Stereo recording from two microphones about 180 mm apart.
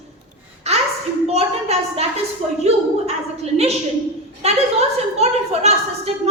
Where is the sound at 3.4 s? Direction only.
35° right (ahead or behind).